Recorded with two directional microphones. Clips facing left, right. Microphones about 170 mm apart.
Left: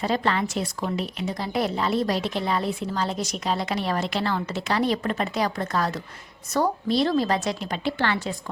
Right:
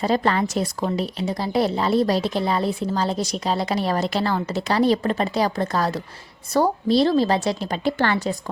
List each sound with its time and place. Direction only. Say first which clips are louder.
0.0 s a woman's voice: right 4 dB; 40° right (ahead or behind)